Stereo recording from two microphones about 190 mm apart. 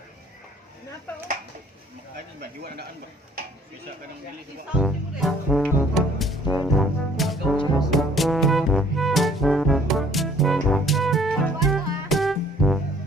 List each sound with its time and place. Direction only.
2.4 s speech: 55° right (ahead or behind)
4.8 s brass instrument: centre (ahead or behind)
7.9 s music: centre (ahead or behind)